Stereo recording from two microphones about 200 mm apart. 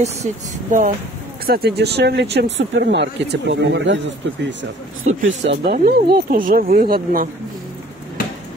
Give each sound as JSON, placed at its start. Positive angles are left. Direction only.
{"t": 0.0, "sound": "speech", "side_deg": -35}